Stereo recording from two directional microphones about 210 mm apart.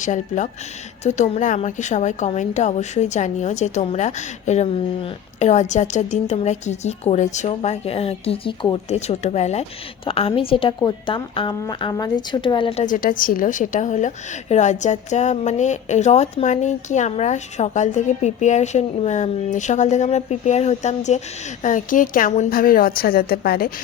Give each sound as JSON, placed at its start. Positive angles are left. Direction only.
{"t": 0.0, "sound": "a woman's voice", "side_deg": 35}
{"t": 12.8, "sound": "a woman's voice", "side_deg": 40}